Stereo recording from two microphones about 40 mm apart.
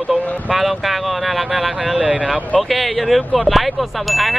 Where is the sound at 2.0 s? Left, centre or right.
Right.